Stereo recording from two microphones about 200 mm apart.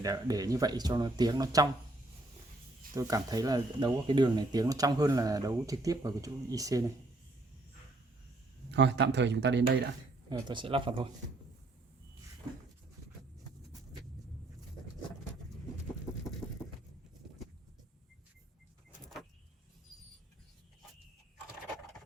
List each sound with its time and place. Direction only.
0.0 s speech: 20° right (ahead or behind)
2.9 s speech: 15° right (ahead or behind)
8.7 s speech: 60° right (ahead or behind)
10.2 s speech: 20° right (ahead or behind)